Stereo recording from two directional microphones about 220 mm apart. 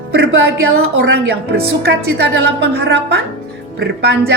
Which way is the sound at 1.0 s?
50° right (ahead or behind).